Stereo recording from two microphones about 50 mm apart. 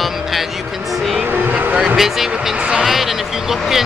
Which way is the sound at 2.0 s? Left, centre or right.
Centre.